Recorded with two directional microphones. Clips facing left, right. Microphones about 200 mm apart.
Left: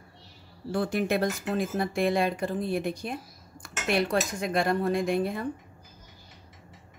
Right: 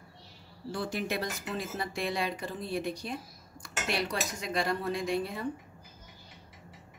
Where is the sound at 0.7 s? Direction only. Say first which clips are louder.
Left 7 dB; 55° left (ahead or behind).